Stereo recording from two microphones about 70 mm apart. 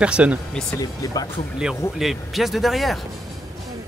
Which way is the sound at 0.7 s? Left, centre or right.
Left.